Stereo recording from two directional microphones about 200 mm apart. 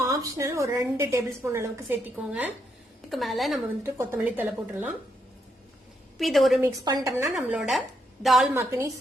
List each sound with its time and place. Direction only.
0.0 s a woman's voice: 15° right (ahead or behind); by 3.6 s centre (ahead or behind)
3.8 s a woman's voice: 15° right (ahead or behind)
6.1 s a woman's voice: centre (ahead or behind)
6.6 s a woman's voice: 20° right (ahead or behind)
7.3 s a woman's voice: 5° right (ahead or behind)
8.5 s a woman's voice: 15° right (ahead or behind)